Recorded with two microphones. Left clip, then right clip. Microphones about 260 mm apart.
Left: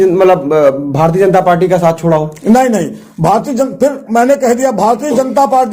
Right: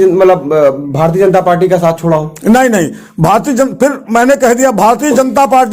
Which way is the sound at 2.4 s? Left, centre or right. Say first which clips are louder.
Right 3 dB; right.